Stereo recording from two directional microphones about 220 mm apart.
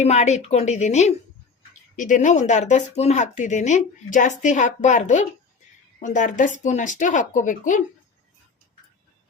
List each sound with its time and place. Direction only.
0.0 s speech: 30° left (ahead or behind)